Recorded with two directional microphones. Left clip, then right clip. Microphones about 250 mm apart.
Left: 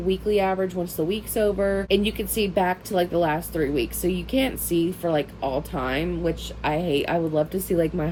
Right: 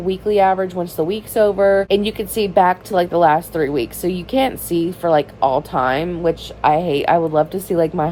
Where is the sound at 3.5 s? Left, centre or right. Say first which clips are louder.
Right 5 dB; centre.